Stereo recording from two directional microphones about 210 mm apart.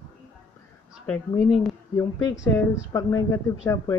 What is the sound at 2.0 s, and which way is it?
Speech, 15° left (ahead or behind).